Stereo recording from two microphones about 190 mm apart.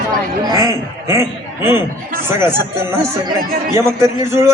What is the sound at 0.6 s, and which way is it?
A man's voice, 15° right (ahead or behind).